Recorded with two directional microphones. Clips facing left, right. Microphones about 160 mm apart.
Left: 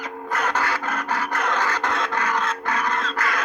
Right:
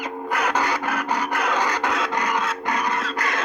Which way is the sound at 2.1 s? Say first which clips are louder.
Even; 15° right (ahead or behind).